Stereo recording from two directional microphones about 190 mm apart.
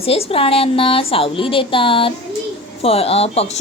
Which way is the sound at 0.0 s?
30° left (ahead or behind).